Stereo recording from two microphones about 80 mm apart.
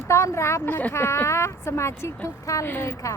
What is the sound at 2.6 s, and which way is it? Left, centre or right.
Speech, left.